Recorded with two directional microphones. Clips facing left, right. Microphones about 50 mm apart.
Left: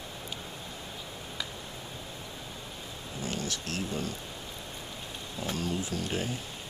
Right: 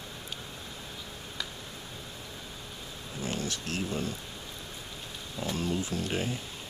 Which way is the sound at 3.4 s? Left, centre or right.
Right.